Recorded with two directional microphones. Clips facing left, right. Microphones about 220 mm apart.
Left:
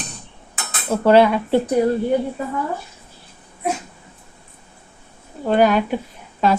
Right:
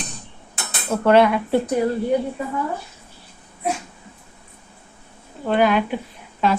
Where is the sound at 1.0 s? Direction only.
30° left (ahead or behind).